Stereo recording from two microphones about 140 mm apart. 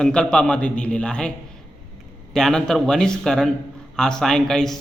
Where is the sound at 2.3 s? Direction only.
5° left (ahead or behind).